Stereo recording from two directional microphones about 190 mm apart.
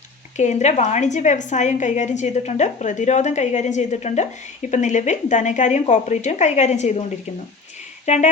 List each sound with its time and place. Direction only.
0.3 s a woman's voice: 40° left (ahead or behind)
8.0 s speech: 35° left (ahead or behind)